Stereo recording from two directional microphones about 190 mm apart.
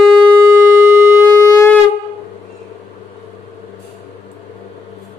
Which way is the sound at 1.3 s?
15° left (ahead or behind).